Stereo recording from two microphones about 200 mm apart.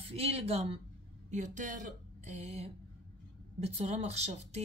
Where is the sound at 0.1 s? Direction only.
30° right (ahead or behind).